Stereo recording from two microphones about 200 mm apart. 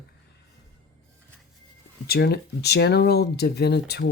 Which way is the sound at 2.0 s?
55° left (ahead or behind).